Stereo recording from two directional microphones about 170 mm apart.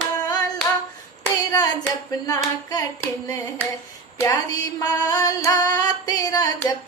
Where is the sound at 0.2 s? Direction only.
20° left (ahead or behind).